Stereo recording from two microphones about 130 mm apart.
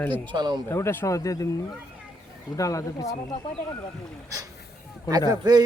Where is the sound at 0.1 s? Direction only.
35° right (ahead or behind).